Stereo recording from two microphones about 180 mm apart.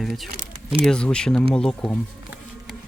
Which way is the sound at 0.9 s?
5° left (ahead or behind).